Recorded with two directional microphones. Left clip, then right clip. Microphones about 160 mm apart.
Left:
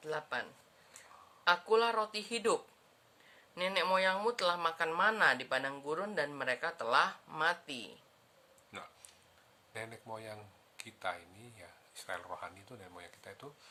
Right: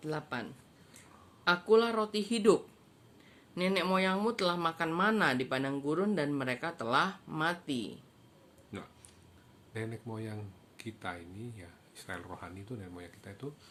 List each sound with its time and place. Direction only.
0.0 s speech: 10° right (ahead or behind)
1.5 s speech: 5° right (ahead or behind)
8.7 s speech: 25° left (ahead or behind)